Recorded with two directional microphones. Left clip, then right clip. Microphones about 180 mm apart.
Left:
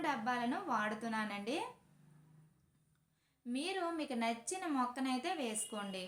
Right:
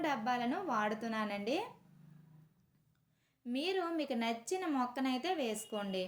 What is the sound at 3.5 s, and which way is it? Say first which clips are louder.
A woman's voice: right 3 dB; 35° right (ahead or behind).